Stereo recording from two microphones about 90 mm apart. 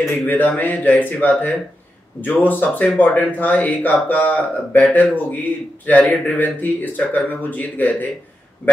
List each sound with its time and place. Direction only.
0.0 s a man's voice: 20° left (ahead or behind)